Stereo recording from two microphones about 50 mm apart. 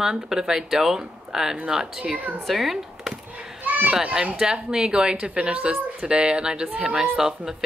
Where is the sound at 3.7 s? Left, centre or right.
Right.